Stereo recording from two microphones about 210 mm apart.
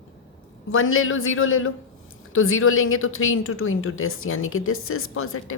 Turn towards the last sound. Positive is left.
turn(degrees=85)